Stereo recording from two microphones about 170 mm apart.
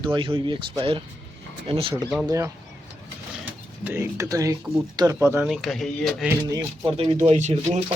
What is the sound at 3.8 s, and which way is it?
Speech, 15° right (ahead or behind).